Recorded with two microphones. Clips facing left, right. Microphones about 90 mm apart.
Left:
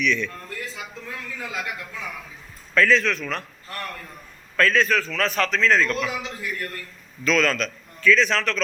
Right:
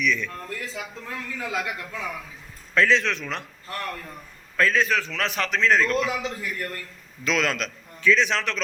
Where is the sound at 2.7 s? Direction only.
25° right (ahead or behind).